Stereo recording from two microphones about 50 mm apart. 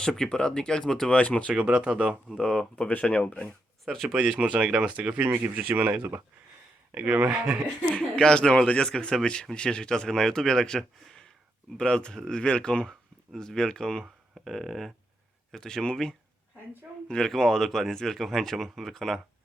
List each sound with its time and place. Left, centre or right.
0.0 s speech: centre
1.1 s speech: left
1.5 s speech: right
2.3 s a sound: centre
2.8 s speech: left
3.8 s a sound: centre
4.1 s speech: right
7.3 s speech: centre
8.2 s speech: centre
12.9 s speech: centre
14.4 s a sound: centre
15.5 s speech: centre